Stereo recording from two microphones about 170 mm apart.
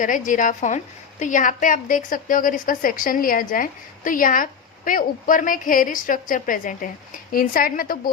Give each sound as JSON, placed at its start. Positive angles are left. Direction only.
{"t": 0.0, "sound": "a woman's voice", "side_deg": 50}